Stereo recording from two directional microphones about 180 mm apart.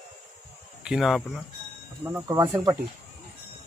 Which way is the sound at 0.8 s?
Centre (ahead or behind).